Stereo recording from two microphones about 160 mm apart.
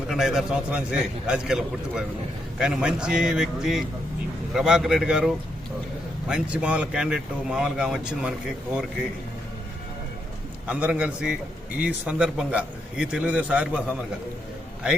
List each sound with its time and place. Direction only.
0.1 s speech: 5° right (ahead or behind)
10.7 s a man's voice: 10° right (ahead or behind)
14.8 s a man's voice: 5° right (ahead or behind)